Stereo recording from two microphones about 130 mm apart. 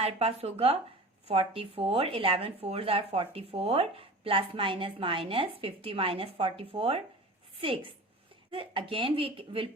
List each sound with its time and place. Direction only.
0.0 s speech: 50° right (ahead or behind)